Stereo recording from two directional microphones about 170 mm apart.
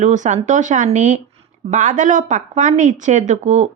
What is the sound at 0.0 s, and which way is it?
A woman's voice, 45° right (ahead or behind).